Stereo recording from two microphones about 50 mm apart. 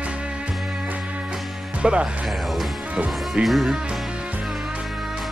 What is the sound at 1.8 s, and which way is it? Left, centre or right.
Speech, right.